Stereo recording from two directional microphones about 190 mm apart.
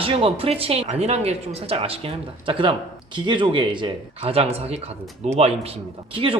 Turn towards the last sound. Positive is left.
turn(degrees=-30)  # may be behind; listen again after turning